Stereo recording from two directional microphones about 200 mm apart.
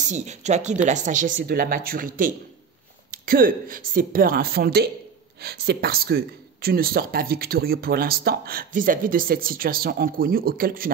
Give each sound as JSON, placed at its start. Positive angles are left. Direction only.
{"t": 0.0, "sound": "speech", "side_deg": -35}